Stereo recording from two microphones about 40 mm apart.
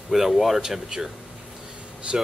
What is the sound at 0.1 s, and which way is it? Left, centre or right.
Speech, centre.